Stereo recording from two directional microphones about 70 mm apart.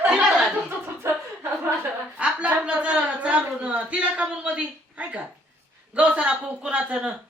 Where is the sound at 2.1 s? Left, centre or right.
Centre.